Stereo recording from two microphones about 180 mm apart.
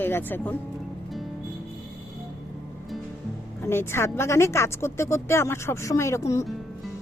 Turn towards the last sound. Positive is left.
turn(degrees=15)  # may be behind; listen again after turning